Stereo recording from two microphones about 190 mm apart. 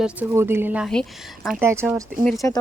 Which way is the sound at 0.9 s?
Centre (ahead or behind).